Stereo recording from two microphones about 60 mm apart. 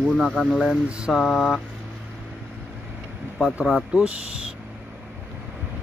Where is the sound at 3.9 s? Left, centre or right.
Centre.